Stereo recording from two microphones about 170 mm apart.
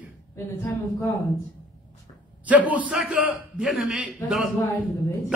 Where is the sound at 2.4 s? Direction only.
10° right (ahead or behind).